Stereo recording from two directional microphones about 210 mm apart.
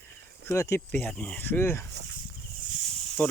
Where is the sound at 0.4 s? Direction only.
15° left (ahead or behind).